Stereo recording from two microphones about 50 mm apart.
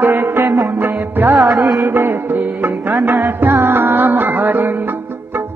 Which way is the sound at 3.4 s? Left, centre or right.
Right.